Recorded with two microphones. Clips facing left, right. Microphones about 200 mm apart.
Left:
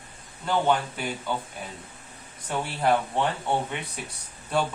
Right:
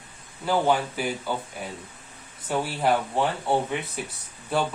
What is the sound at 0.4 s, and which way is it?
Speech, 5° right (ahead or behind).